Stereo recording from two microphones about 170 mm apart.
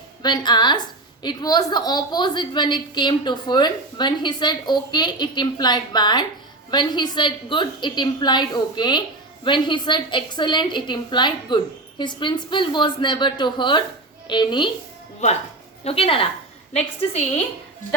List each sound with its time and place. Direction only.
0.2 s a woman's voice: 25° left (ahead or behind)
15.8 s a woman's voice: 35° left (ahead or behind)